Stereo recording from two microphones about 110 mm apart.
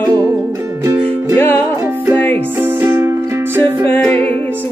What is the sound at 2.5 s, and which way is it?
Music, 20° right (ahead or behind).